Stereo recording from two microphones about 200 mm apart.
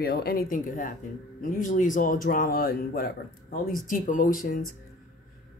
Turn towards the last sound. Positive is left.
turn(degrees=40)  # may be behind; listen again after turning